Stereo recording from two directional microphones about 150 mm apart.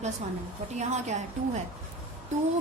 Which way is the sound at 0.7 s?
50° right (ahead or behind).